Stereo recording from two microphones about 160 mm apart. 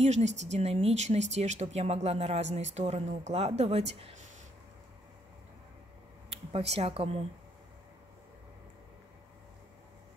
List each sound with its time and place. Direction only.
0.0 s speech: 45° right (ahead or behind)
6.3 s speech: 40° right (ahead or behind)